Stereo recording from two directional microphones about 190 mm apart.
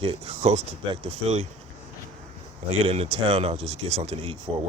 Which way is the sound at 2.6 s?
30° right (ahead or behind).